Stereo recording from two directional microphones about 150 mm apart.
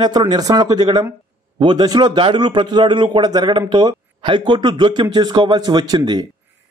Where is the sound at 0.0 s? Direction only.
30° right (ahead or behind).